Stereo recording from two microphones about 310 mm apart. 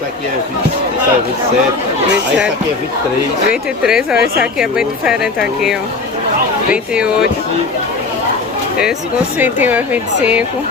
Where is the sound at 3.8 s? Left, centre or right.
Centre.